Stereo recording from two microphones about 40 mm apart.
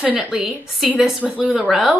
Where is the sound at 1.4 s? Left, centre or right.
Right.